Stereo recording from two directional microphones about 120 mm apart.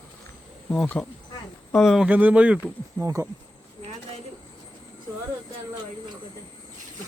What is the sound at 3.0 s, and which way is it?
Speech, 25° right (ahead or behind).